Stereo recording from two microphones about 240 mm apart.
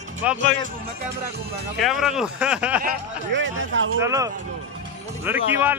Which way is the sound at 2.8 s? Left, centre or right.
Right.